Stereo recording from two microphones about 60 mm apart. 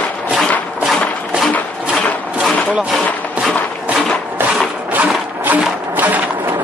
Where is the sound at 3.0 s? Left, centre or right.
Left.